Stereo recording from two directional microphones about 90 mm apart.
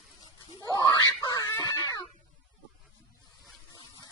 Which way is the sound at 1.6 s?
45° left (ahead or behind).